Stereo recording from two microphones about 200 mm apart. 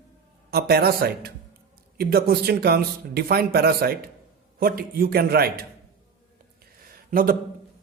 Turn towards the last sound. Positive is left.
turn(degrees=-45)  # may be behind; listen again after turning